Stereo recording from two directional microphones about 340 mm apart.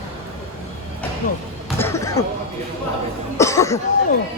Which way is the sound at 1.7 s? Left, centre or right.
Centre.